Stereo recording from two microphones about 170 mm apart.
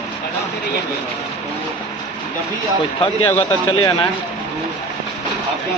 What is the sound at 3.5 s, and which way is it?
Speech, 25° left (ahead or behind).